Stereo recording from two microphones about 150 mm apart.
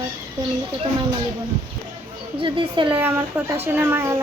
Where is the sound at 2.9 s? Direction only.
10° right (ahead or behind).